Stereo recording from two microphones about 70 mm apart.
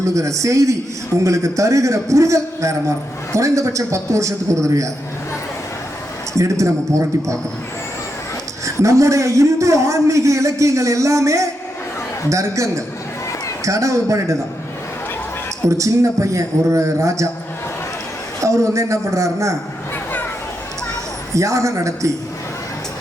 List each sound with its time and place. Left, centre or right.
0.0 s a man's voice: right
6.3 s a man's voice: right
8.6 s a man's voice: right
15.6 s a man's voice: right
18.3 s a man's voice: right
21.3 s a man's voice: right